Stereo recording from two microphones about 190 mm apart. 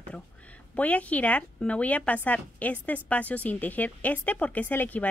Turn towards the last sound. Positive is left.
turn(degrees=10)  # may be behind; listen again after turning